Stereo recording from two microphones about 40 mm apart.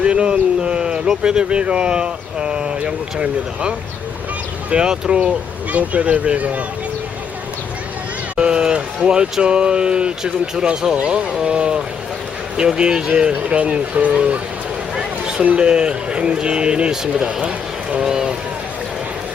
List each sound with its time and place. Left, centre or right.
0.0 s speech: right
5.7 s speech: right
8.4 s a sound: right
9.4 s speech: right
14.9 s a sound: centre
15.5 s speech: right
16.9 s speech: centre
18.0 s run: centre